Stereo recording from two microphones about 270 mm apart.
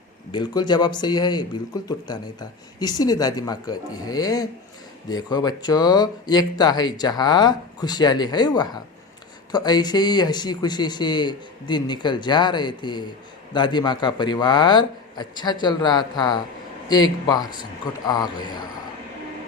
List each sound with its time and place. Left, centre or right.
0.3 s speech: centre